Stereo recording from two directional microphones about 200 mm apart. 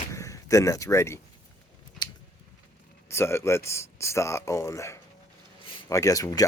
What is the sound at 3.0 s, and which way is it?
Speech, 10° left (ahead or behind).